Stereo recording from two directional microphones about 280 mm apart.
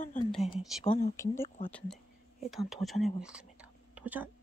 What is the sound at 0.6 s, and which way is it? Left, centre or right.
Speech, centre.